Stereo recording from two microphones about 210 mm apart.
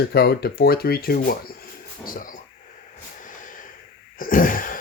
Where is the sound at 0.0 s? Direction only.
50° left (ahead or behind).